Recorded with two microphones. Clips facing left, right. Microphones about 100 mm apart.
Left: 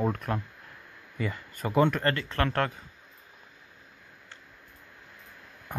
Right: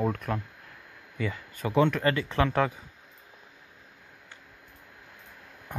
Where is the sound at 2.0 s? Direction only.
10° right (ahead or behind).